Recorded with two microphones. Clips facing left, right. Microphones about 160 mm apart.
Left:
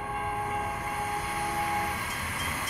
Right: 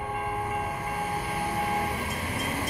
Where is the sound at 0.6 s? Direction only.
25° right (ahead or behind).